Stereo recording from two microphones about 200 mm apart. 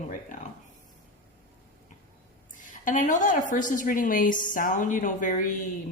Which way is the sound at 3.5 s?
40° left (ahead or behind).